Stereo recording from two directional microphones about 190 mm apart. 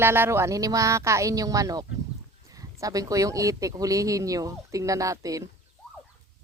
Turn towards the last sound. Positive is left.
turn(degrees=-15)  # may be behind; listen again after turning